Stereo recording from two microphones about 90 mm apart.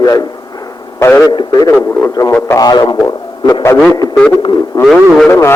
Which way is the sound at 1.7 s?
25° left (ahead or behind).